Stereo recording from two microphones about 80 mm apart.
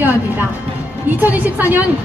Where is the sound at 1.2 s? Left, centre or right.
Right.